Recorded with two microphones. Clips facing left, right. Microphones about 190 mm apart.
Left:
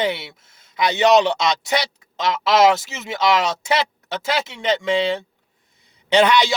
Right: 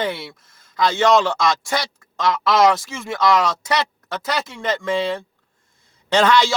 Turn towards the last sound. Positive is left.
turn(degrees=20)  # may be behind; listen again after turning